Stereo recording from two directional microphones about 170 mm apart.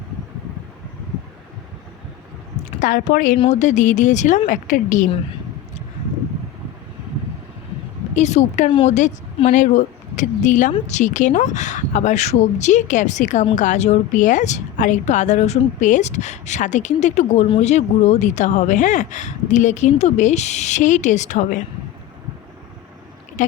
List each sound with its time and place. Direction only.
2.6 s a woman's voice: 50° left (ahead or behind)
3.3 s a woman's voice: 40° left (ahead or behind)
8.1 s a woman's voice: 40° left (ahead or behind)
23.4 s a sound: 50° left (ahead or behind)